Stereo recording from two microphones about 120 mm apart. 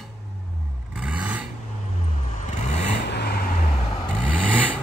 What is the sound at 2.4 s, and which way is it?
Vehicle, 90° left.